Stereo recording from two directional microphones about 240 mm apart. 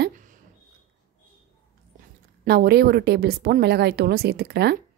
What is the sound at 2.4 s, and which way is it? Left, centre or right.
A woman's voice, right.